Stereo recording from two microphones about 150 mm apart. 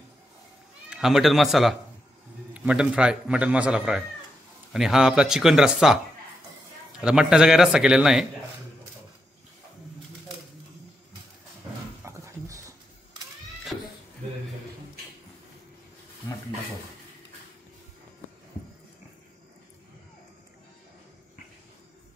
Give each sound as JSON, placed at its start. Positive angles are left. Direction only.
{"t": 0.8, "sound": "a man's voice", "side_deg": 0}
{"t": 7.0, "sound": "a man's voice", "side_deg": -5}
{"t": 12.0, "sound": "dog", "side_deg": -20}
{"t": 13.7, "sound": "a sound", "side_deg": 5}